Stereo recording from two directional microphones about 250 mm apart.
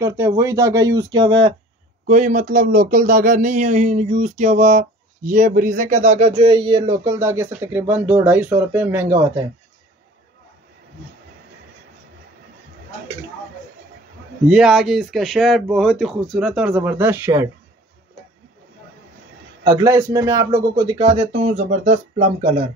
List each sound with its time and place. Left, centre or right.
0.0 s speech: centre
2.0 s speech: right; by 9.4 s centre
14.5 s speech: centre
19.6 s speech: centre